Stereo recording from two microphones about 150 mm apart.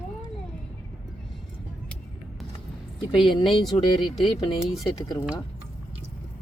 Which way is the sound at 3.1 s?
35° left (ahead or behind).